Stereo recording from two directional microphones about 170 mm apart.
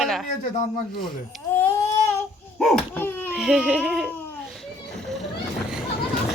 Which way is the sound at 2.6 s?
Centre (ahead or behind).